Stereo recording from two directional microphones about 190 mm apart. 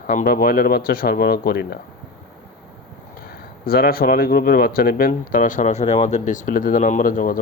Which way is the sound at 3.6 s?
50° left (ahead or behind).